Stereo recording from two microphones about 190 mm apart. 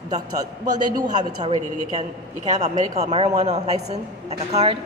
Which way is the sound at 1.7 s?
40° right (ahead or behind).